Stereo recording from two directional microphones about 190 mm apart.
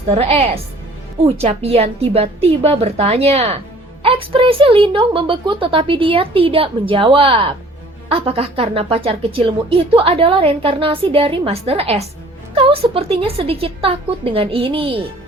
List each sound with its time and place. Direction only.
0.1 s a woman's voice: 30° right (ahead or behind)